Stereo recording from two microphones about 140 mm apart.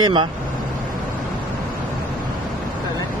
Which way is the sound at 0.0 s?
35° right (ahead or behind).